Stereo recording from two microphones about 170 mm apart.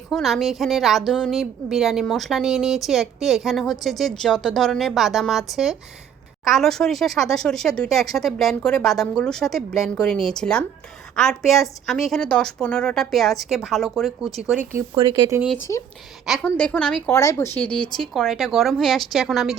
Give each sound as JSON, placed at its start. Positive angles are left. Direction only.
{"t": 0.1, "sound": "a woman's voice", "side_deg": 0}
{"t": 14.9, "sound": "speech", "side_deg": -30}
{"t": 16.2, "sound": "a woman's voice", "side_deg": 0}